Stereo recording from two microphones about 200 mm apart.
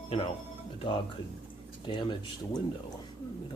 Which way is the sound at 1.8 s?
25° left (ahead or behind).